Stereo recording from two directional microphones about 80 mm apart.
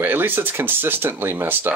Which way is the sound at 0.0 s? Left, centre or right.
Right.